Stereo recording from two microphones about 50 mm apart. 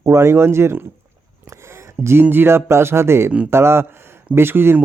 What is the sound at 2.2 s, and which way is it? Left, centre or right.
Speech, right.